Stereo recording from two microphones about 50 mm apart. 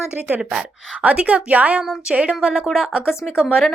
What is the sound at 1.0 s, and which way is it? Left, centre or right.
Speech, right.